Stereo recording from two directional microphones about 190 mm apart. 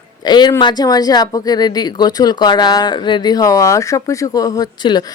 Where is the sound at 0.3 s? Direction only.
20° left (ahead or behind).